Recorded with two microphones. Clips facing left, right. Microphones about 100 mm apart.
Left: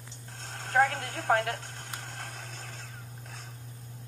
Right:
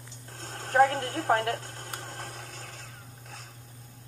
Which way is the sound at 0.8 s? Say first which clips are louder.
Right 2 dB; 35° right (ahead or behind).